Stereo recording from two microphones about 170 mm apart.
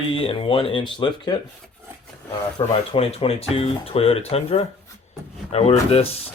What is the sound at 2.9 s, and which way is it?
Speech, 35° left (ahead or behind).